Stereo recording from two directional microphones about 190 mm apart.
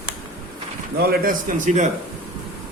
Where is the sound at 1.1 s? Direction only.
45° right (ahead or behind).